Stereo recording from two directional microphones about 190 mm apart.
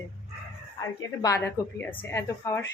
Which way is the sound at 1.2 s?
15° left (ahead or behind).